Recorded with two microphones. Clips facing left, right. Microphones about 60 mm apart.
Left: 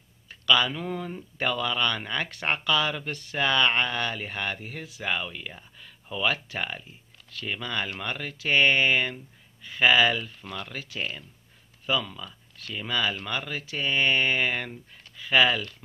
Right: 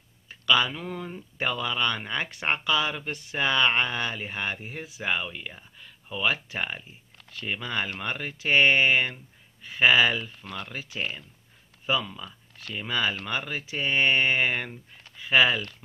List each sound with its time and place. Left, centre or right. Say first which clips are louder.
0.3 s speech: even; centre